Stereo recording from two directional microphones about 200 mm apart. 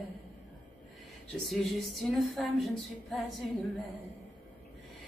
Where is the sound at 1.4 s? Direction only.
Centre (ahead or behind).